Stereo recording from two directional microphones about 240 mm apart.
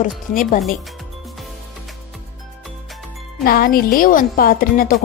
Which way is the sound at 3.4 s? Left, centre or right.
Left.